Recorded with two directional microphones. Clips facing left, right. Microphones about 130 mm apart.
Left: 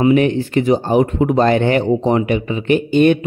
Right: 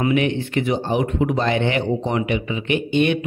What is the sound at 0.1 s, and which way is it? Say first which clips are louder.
A man's voice: left 6 dB; 40° left (ahead or behind).